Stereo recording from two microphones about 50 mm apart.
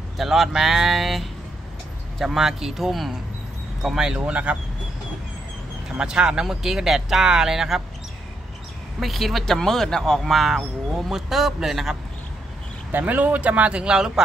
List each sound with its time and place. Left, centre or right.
0.2 s speech: centre
4.3 s speech: right
5.9 s speech: centre
9.0 s speech: centre
9.6 s speech: centre
12.9 s speech: right; by 14.2 s centre